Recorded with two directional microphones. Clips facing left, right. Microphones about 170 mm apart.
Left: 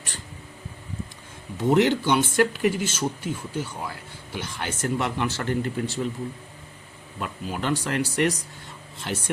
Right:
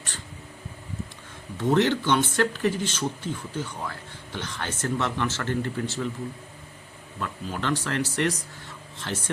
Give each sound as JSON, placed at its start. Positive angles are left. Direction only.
{"t": 1.5, "sound": "speech", "side_deg": 15}
{"t": 7.2, "sound": "speech", "side_deg": 15}